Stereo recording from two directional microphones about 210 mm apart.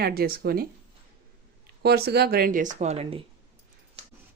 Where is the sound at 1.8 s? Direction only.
50° right (ahead or behind); by 3.2 s 30° right (ahead or behind).